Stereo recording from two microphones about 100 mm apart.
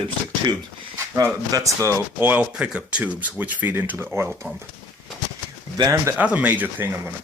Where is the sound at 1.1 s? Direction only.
30° right (ahead or behind).